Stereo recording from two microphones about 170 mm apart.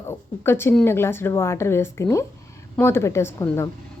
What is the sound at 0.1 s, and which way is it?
Speech, 15° left (ahead or behind).